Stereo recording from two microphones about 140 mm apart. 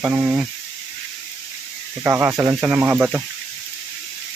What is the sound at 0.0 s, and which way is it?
Speech, 15° right (ahead or behind).